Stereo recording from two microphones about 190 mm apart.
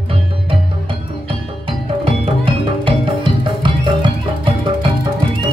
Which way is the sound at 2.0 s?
30° right (ahead or behind).